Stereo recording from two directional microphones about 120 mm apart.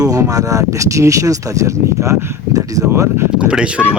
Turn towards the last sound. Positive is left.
turn(degrees=-10)  # may be behind; listen again after turning